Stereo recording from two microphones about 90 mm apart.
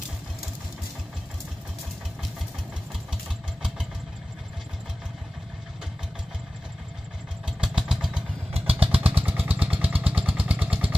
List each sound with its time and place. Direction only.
7.4 s vehicle: 5° right (ahead or behind)
8.5 s vehicle: 90° right
9.2 s vehicle: 20° right (ahead or behind)